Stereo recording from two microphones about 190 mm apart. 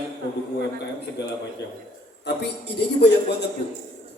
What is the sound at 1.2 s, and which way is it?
Speech, 65° left (ahead or behind).